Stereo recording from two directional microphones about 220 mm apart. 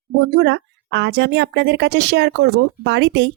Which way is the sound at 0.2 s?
50° right (ahead or behind).